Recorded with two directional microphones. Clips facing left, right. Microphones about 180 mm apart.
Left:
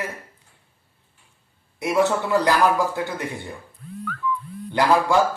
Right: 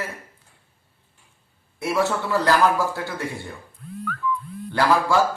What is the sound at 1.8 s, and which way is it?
Speech, 20° left (ahead or behind).